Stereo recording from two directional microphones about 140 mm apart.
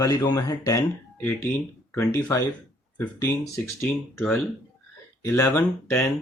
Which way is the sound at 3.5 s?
15° left (ahead or behind).